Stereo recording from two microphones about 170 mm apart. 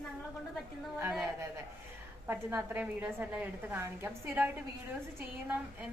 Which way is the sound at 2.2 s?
15° right (ahead or behind).